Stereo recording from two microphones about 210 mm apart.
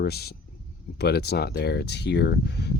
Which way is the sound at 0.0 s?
50° left (ahead or behind).